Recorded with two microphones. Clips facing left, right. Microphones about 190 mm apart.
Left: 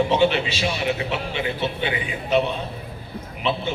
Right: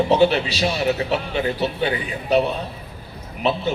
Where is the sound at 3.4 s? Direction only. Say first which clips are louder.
Right 3 dB; 40° right (ahead or behind).